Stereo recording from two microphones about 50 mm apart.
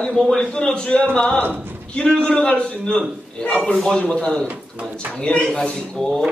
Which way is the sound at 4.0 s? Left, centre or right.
Centre.